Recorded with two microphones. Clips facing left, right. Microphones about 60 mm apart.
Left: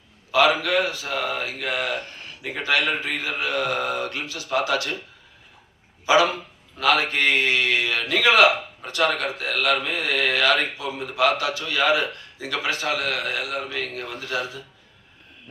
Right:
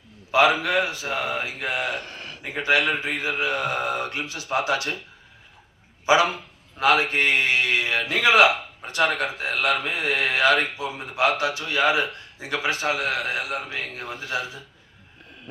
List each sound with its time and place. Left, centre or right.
0.3 s speech: right
2.0 s a sound: right
2.5 s speech: right
6.1 s a man's voice: right